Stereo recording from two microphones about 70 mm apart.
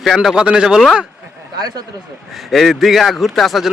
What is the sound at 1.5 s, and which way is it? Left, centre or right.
Speech, right.